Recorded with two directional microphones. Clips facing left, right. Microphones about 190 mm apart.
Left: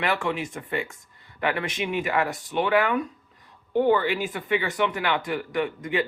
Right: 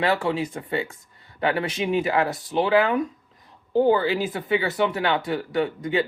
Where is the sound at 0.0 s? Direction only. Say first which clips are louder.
Right 4 dB; 35° right (ahead or behind).